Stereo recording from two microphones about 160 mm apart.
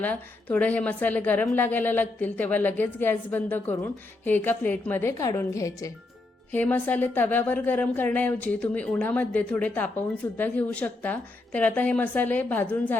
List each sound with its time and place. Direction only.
0.0 s a woman's voice: 10° left (ahead or behind)